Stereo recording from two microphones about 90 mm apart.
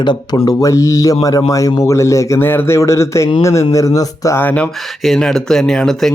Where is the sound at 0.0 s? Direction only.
55° left (ahead or behind).